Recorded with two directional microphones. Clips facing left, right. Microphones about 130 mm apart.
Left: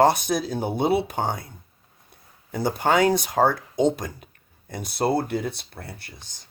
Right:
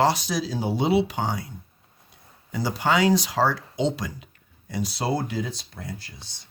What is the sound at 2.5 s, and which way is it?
Speech, 55° left (ahead or behind).